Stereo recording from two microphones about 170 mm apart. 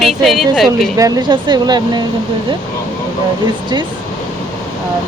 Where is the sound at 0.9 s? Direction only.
20° right (ahead or behind).